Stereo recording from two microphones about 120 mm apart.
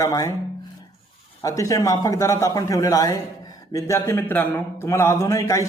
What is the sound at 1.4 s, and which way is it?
A man's voice, 30° left (ahead or behind).